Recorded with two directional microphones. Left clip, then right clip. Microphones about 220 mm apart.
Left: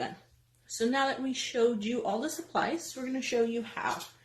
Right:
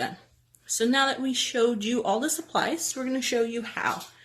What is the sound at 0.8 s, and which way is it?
Speech, 30° right (ahead or behind).